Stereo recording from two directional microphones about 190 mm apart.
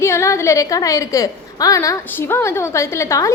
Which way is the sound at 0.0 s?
15° left (ahead or behind).